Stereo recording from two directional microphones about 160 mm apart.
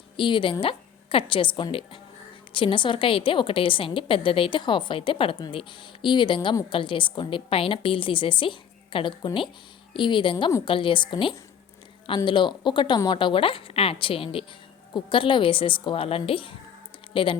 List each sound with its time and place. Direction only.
0.2 s a woman's voice: 30° left (ahead or behind)